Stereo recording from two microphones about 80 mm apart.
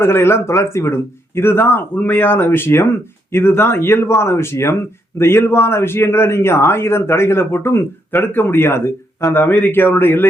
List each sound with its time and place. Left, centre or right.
0.0 s speech: left